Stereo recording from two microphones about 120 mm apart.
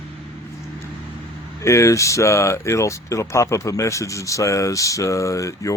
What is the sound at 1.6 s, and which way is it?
Speech, 25° left (ahead or behind).